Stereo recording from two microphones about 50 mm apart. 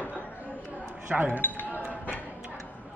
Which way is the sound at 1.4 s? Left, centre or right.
Left.